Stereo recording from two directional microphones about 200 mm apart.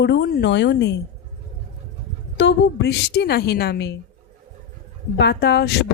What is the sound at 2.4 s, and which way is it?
Speech, 60° left (ahead or behind).